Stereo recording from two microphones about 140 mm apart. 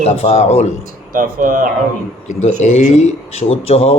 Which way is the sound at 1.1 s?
75° right (ahead or behind).